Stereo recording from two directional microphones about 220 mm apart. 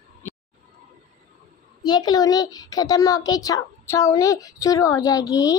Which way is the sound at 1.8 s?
20° left (ahead or behind).